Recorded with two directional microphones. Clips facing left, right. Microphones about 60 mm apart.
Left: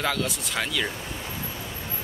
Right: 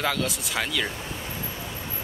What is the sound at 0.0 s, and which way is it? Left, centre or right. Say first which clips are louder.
Speech: even; centre.